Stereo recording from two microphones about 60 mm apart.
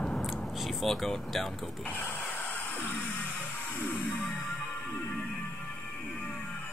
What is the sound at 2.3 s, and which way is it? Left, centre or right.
Music, left.